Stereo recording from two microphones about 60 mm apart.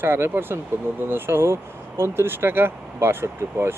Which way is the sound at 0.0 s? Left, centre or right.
Right.